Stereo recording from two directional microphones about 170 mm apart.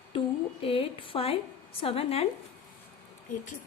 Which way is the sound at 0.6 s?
35° left (ahead or behind).